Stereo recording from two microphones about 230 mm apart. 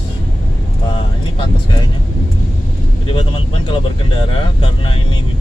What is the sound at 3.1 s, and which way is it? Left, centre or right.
Speech, left.